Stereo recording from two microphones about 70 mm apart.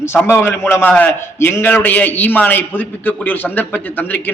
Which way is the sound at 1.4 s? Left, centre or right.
Left.